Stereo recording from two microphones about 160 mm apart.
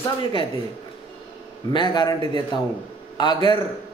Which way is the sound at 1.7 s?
30° left (ahead or behind).